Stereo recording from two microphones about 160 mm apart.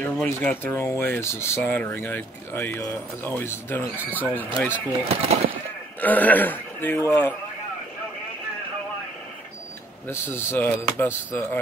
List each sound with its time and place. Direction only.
0.0 s speech: 10° left (ahead or behind)
5.0 s speech: 40° right (ahead or behind)
5.9 s speech: 10° left (ahead or behind)
10.3 s speech: 15° left (ahead or behind)